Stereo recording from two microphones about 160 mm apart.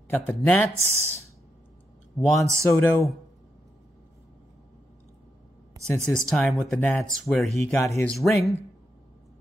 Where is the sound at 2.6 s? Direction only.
10° left (ahead or behind).